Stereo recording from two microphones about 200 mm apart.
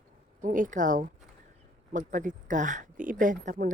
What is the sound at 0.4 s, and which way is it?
A woman's voice, 40° right (ahead or behind).